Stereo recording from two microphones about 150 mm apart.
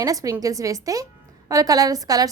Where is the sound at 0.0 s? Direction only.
25° right (ahead or behind).